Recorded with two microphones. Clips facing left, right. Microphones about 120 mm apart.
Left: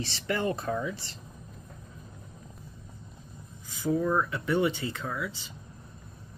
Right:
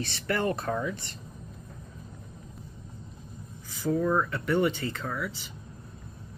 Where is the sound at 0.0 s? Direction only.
20° left (ahead or behind).